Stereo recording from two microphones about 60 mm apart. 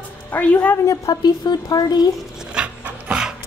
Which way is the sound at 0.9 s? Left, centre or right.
Left.